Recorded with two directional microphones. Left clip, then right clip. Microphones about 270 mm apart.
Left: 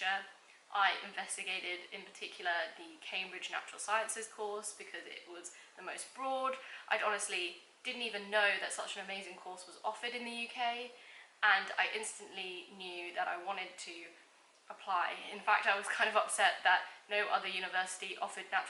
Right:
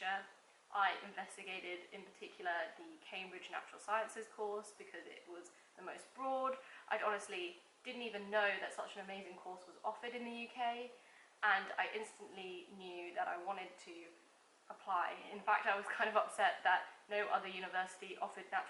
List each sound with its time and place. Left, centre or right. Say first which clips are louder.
0.0 s a sound: left 5 dB; centre
0.7 s a woman's voice: left 5 dB; centre
4.4 s speech: left 2 dB; right
4.8 s a woman's voice: left 6 dB; centre